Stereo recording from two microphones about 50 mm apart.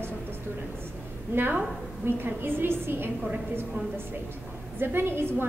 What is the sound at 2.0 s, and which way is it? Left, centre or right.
A woman's voice, right.